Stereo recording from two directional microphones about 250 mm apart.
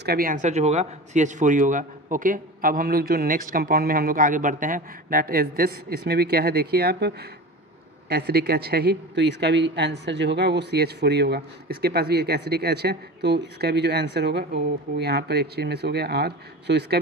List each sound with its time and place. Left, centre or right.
0.0 s speech: right